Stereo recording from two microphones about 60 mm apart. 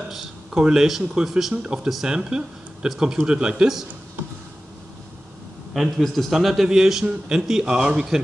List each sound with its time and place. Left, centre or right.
0.1 s a man's voice: centre
5.7 s a man's voice: centre